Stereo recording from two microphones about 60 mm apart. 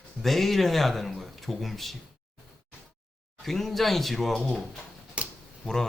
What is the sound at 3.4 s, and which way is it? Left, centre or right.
Speech, centre.